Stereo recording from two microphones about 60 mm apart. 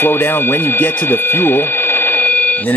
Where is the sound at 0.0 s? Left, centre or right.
Left.